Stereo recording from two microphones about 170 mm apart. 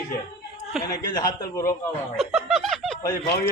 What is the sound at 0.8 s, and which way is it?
Speech, 20° left (ahead or behind).